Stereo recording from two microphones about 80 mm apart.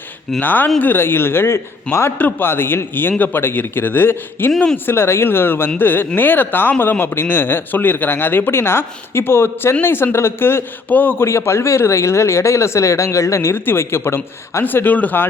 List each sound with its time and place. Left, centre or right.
0.3 s a man's voice: left
4.5 s speech: centre
4.9 s a man's voice: left